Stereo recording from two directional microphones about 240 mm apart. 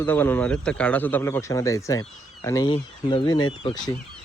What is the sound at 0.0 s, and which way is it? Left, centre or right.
Speech, centre.